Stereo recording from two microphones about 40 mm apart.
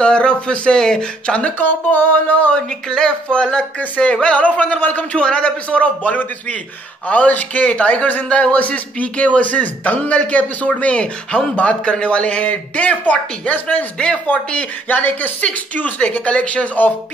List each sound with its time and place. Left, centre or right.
0.0 s speech: left
1.6 s a sound: left
2.5 s speech: left
3.9 s a man's voice: left
4.7 s a sound: left
5.2 s a man's voice: left
13.9 s a man's voice: left
14.9 s a sound: left
15.4 s a man's voice: left